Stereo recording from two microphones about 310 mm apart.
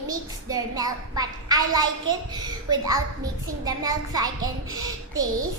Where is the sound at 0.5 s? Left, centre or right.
Centre.